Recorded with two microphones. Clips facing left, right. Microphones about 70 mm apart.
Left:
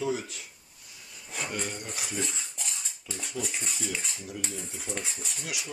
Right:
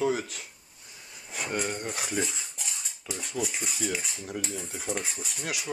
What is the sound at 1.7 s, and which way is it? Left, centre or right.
Speech, right.